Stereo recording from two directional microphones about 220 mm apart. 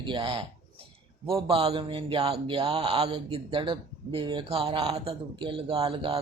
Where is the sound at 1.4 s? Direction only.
25° right (ahead or behind).